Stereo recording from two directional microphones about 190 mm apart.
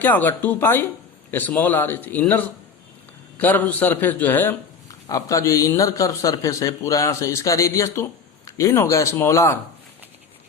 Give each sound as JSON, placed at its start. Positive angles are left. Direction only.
{"t": 0.0, "sound": "speech", "side_deg": 10}